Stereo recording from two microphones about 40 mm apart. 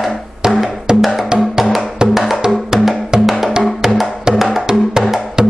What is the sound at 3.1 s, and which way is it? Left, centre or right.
Music, centre.